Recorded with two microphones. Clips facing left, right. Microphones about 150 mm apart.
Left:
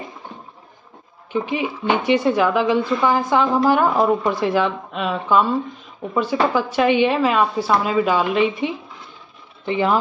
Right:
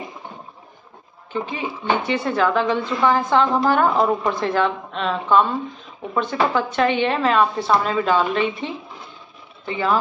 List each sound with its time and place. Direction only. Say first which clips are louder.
1.3 s speech: left 4 dB; 15° left (ahead or behind)
6.5 s speech: left 2 dB; 10° left (ahead or behind)